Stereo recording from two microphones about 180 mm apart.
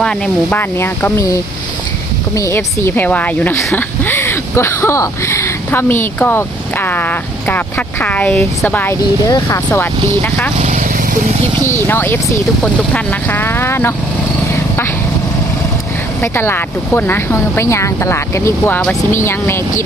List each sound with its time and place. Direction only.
0.0 s speech: 5° left (ahead or behind)
10.7 s vehicle: 45° right (ahead or behind)
11.6 s speech: 15° left (ahead or behind)
16.2 s speech: 15° left (ahead or behind)